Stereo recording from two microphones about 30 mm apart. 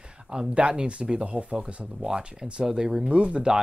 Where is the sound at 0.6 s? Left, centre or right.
Right.